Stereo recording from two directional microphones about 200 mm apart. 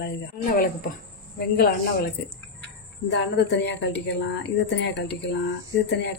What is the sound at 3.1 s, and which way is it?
A woman's voice, 60° left (ahead or behind).